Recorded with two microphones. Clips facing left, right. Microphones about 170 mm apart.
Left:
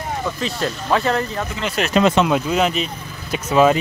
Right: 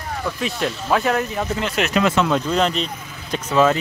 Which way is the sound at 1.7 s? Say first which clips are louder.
Left 4 dB; 35° left (ahead or behind).